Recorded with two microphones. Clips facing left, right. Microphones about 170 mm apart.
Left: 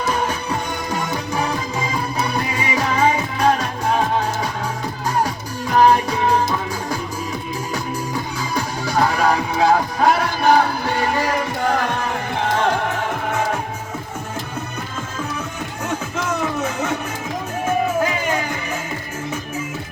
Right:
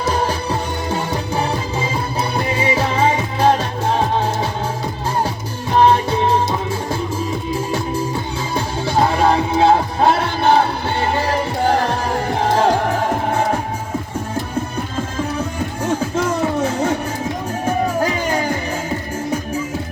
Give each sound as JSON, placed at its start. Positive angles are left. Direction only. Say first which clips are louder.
{"t": 0.1, "sound": "music", "louder": "right 4 dB", "side_deg": -30}
{"t": 8.5, "sound": "music", "louder": "right 2 dB", "side_deg": -25}
{"t": 15.4, "sound": "music", "louder": "right 5 dB", "side_deg": -30}